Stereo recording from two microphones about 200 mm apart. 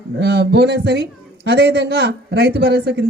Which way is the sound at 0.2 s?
55° right (ahead or behind).